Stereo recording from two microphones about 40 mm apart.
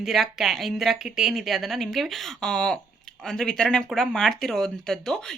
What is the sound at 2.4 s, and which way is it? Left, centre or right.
Speech, centre.